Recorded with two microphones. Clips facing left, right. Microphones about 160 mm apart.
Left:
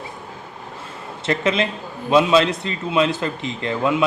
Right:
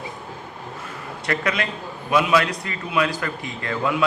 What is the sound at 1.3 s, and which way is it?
A man's voice, 20° left (ahead or behind).